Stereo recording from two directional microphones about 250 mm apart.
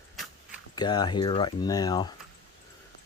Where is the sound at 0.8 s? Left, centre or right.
Centre.